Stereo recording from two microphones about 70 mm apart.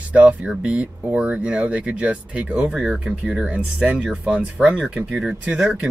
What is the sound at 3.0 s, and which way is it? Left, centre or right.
Speech, centre.